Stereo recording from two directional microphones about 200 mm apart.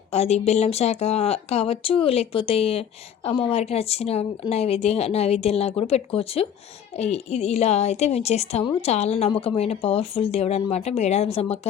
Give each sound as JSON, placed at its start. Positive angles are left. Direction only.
{"t": 0.1, "sound": "a woman's voice", "side_deg": 35}